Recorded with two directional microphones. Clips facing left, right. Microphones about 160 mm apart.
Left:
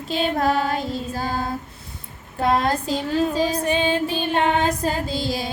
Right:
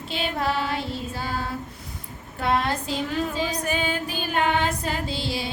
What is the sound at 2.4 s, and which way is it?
Child singing, 40° left (ahead or behind).